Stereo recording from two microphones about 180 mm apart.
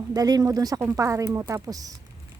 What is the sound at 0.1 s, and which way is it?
Speech, 20° right (ahead or behind).